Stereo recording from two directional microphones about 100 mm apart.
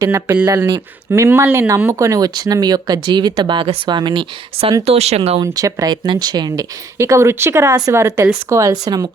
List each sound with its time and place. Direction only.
0.0 s speech: 30° right (ahead or behind); by 4.7 s 50° right (ahead or behind)
4.9 s speech: 90° right
5.4 s speech: 40° right (ahead or behind)
7.0 s speech: 25° right (ahead or behind)